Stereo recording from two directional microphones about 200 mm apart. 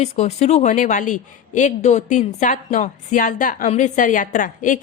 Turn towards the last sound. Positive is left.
turn(degrees=40)  # may be behind; listen again after turning